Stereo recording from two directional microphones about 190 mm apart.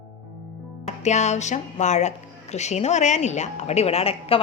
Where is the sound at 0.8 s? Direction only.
35° left (ahead or behind).